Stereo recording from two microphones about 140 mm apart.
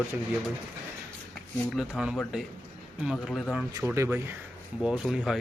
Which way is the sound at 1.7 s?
5° right (ahead or behind).